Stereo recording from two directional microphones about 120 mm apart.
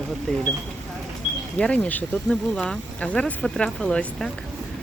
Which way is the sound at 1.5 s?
10° left (ahead or behind).